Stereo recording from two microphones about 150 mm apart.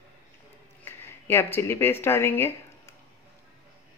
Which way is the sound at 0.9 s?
15° left (ahead or behind).